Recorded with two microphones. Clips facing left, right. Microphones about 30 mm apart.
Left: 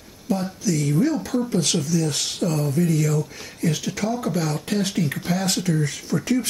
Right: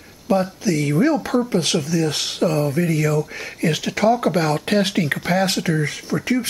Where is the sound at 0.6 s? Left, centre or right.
Right.